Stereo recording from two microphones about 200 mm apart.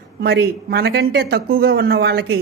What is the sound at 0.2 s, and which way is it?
Speech, 55° right (ahead or behind).